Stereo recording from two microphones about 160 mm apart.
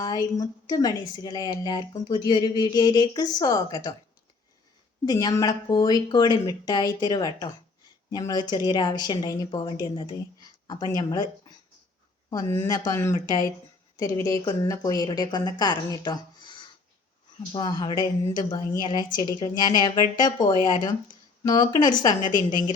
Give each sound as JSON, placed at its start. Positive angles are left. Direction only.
{"t": 0.0, "sound": "speech", "side_deg": 25}
{"t": 5.0, "sound": "speech", "side_deg": 25}
{"t": 12.3, "sound": "speech", "side_deg": 20}